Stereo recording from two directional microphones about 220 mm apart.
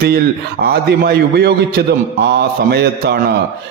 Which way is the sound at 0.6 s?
45° right (ahead or behind).